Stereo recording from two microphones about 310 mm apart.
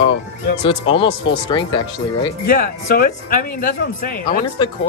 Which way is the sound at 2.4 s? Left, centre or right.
Left.